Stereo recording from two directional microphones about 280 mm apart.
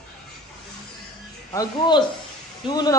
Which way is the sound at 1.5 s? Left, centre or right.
Centre.